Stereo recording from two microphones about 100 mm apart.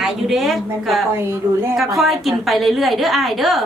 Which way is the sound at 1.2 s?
25° right (ahead or behind).